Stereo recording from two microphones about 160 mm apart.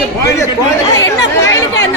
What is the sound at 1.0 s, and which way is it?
Speech, 20° left (ahead or behind).